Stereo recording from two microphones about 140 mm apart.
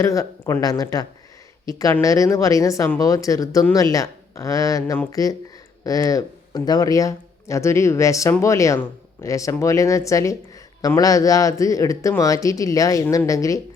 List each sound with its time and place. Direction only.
0.0 s speech: 20° left (ahead or behind)